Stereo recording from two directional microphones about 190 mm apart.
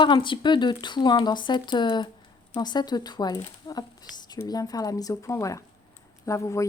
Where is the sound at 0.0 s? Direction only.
25° left (ahead or behind).